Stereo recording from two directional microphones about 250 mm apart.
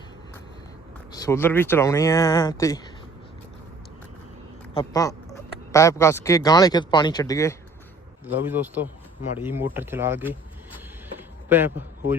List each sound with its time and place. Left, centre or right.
1.1 s speech: centre
4.7 s speech: centre
8.4 s speech: centre
11.2 s a sound: centre